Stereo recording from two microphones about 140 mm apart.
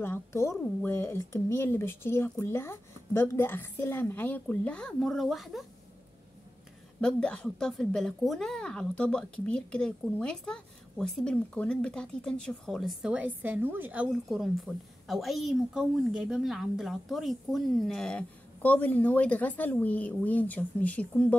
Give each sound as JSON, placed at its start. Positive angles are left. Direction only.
{"t": 0.0, "sound": "a woman's voice", "side_deg": 15}
{"t": 7.0, "sound": "speech", "side_deg": 5}
{"t": 14.3, "sound": "speech", "side_deg": 0}